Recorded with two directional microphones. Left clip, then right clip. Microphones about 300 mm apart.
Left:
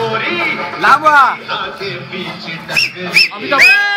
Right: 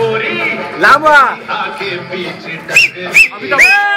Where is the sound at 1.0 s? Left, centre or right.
Centre.